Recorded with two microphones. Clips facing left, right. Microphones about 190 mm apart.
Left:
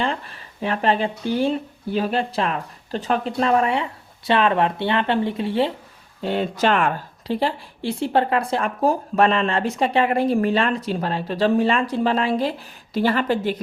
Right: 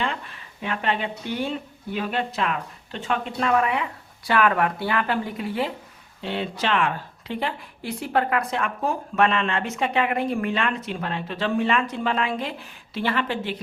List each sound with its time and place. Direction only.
0.0 s speech: 35° left (ahead or behind)
6.2 s speech: 45° left (ahead or behind)